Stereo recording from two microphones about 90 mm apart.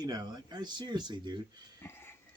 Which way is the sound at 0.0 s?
50° right (ahead or behind).